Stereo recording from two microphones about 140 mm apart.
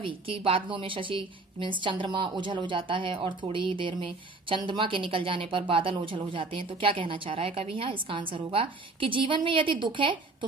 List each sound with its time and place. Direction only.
0.0 s a woman's voice: 40° right (ahead or behind)